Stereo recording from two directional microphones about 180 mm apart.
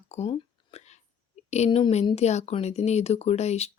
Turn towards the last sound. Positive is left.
turn(degrees=35)  # may be behind; listen again after turning